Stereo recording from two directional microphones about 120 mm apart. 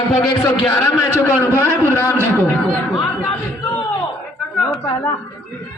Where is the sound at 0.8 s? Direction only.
20° left (ahead or behind).